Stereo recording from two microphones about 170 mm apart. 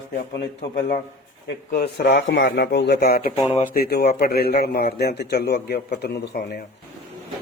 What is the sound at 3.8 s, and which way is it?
A man's voice, 70° left (ahead or behind).